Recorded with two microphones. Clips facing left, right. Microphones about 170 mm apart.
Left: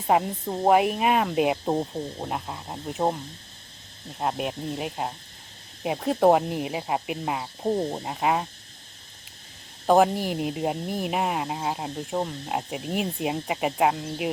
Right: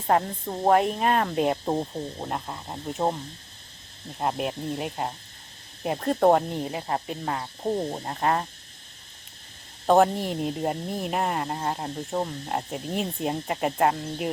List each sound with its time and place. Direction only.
0.1 s speech: 5° left (ahead or behind)
4.2 s speech: centre (ahead or behind)
9.8 s speech: centre (ahead or behind)